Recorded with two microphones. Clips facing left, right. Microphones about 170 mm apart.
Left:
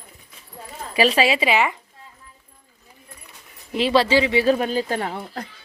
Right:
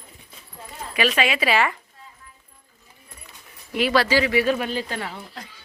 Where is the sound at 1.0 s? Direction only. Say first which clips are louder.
Left 4 dB; 35° left (ahead or behind).